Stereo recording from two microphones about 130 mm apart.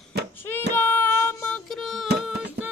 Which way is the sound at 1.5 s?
Centre (ahead or behind).